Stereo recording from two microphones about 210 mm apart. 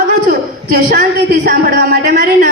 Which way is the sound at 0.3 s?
40° right (ahead or behind).